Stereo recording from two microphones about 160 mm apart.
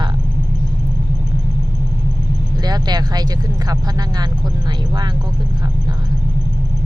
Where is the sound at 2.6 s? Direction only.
25° right (ahead or behind).